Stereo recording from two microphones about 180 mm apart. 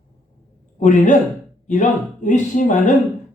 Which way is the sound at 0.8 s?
45° left (ahead or behind).